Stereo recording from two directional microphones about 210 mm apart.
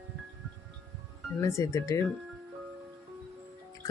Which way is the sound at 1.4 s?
15° left (ahead or behind).